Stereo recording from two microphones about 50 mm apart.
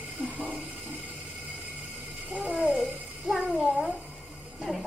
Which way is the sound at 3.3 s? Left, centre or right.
Centre.